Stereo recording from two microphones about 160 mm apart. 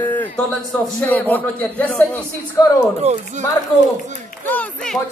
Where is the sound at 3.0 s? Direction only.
45° right (ahead or behind).